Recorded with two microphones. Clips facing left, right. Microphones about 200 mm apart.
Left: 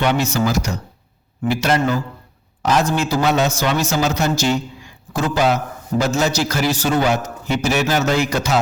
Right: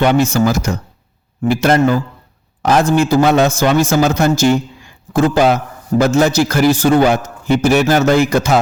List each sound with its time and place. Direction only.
0.0 s a man's voice: 50° right (ahead or behind)